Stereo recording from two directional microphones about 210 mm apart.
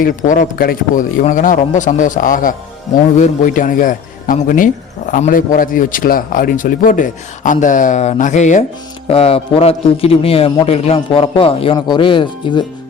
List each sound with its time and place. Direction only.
0.0 s a man's voice: 40° left (ahead or behind); by 12.6 s 25° left (ahead or behind)